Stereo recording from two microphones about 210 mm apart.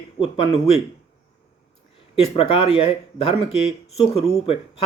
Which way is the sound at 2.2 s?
25° left (ahead or behind).